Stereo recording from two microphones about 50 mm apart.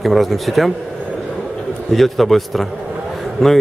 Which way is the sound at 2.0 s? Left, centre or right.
Centre.